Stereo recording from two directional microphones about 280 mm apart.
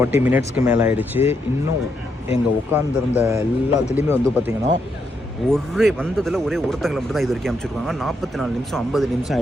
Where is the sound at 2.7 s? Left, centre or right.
Centre.